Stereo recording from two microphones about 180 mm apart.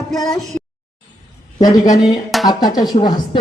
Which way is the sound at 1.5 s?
20° left (ahead or behind).